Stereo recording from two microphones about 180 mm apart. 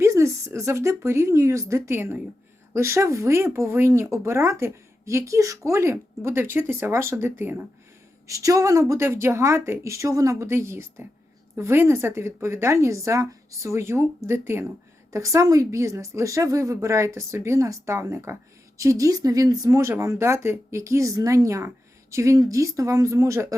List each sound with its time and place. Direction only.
0.0 s speech: 15° right (ahead or behind)